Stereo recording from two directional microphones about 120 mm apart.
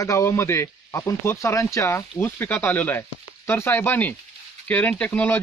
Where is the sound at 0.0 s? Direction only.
25° left (ahead or behind).